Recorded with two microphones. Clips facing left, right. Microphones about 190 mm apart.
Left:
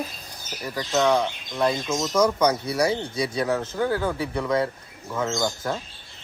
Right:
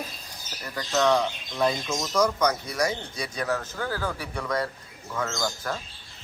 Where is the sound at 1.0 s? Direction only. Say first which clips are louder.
Left 1 dB; centre (ahead or behind).